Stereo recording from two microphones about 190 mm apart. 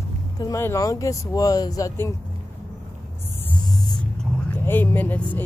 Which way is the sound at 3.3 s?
5° left (ahead or behind).